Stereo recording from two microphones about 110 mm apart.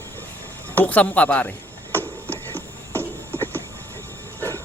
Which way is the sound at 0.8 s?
15° left (ahead or behind).